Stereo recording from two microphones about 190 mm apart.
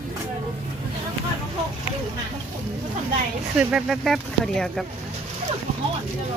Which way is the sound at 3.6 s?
5° right (ahead or behind).